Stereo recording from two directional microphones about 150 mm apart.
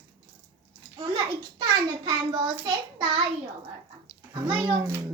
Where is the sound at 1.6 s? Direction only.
30° right (ahead or behind).